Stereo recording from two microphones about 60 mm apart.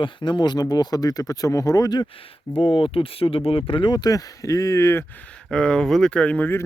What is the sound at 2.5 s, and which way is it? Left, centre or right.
Speech, left.